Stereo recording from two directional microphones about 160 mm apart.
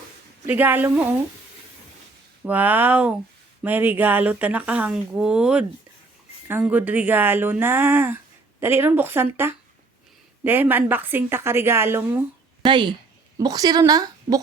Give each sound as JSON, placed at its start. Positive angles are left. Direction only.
{"t": 0.4, "sound": "speech", "side_deg": -10}
{"t": 2.4, "sound": "speech", "side_deg": -10}
{"t": 12.6, "sound": "a woman's voice", "side_deg": -30}